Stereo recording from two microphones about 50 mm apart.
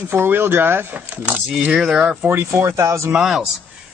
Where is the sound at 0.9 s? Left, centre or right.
Right.